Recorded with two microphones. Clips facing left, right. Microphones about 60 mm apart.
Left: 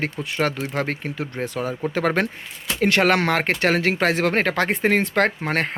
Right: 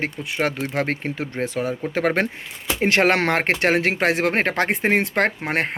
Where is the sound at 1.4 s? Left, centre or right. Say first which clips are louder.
Right 2 dB; left.